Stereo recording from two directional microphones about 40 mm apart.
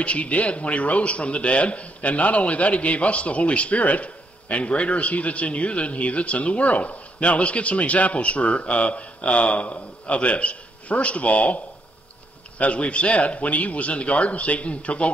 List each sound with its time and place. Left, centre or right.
0.0 s a man's voice: left